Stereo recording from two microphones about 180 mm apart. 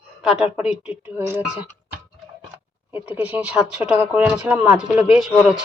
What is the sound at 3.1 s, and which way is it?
Speech, 10° right (ahead or behind).